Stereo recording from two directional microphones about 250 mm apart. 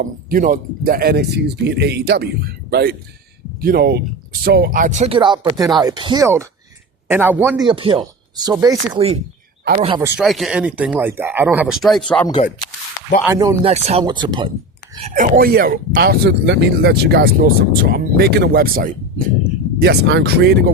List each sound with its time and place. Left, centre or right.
0.0 s speech: right
10.2 s speech: centre
13.2 s speech: centre
13.7 s speech: right
15.0 s speech: right